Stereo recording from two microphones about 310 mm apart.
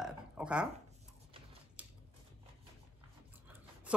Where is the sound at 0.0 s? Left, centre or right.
Centre.